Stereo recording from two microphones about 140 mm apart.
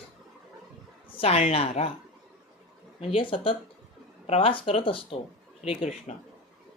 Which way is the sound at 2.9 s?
40° left (ahead or behind).